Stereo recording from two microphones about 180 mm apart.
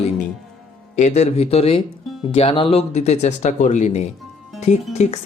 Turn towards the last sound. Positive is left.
turn(degrees=35)  # may be behind; listen again after turning